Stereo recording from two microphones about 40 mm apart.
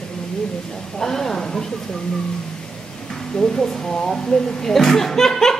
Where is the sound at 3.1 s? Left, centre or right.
Centre.